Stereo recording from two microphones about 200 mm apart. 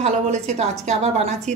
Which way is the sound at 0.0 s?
35° right (ahead or behind).